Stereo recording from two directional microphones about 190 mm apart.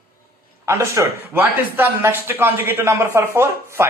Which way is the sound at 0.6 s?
15° right (ahead or behind).